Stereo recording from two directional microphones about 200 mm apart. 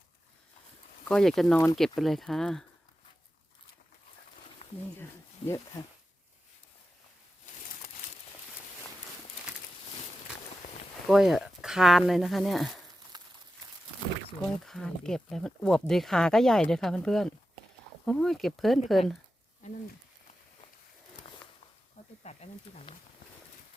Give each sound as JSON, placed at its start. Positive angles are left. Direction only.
{"t": 1.0, "sound": "speech", "side_deg": 0}
{"t": 5.4, "sound": "speech", "side_deg": 30}
{"t": 11.1, "sound": "speech", "side_deg": 0}
{"t": 13.1, "sound": "a sound", "side_deg": -20}
{"t": 14.4, "sound": "speech", "side_deg": 0}
{"t": 22.2, "sound": "speech", "side_deg": 35}